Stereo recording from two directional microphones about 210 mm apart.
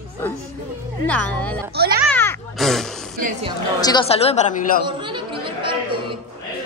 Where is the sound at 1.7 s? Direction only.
50° right (ahead or behind).